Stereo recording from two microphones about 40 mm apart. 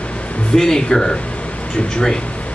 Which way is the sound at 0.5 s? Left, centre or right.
Centre.